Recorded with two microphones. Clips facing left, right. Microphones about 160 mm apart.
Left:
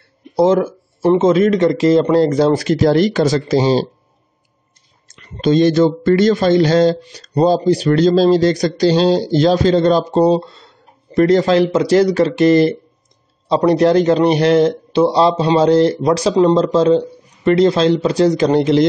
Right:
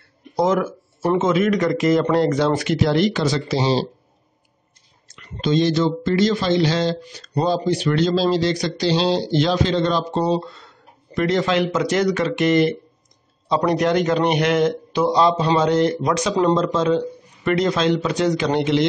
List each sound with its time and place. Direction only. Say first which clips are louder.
0.4 s speech: left 6 dB; 30° left (ahead or behind)
5.4 s speech: left 6 dB; 50° left (ahead or behind)